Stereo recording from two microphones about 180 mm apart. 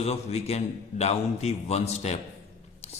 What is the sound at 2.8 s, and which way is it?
Whispering, 35° left (ahead or behind).